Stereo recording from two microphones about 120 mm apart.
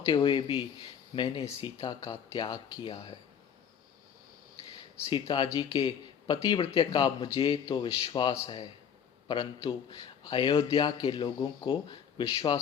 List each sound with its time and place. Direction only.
0.1 s a man's voice: 40° left (ahead or behind)
5.0 s a man's voice: 40° left (ahead or behind)